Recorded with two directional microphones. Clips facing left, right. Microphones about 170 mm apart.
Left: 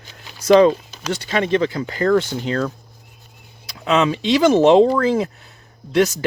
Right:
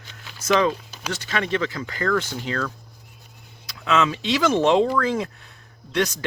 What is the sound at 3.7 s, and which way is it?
Speech, 30° left (ahead or behind).